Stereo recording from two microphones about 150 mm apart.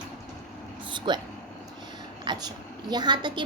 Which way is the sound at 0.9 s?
30° right (ahead or behind).